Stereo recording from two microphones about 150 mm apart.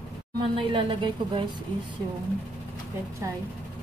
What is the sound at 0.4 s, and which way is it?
A woman's voice, 35° right (ahead or behind).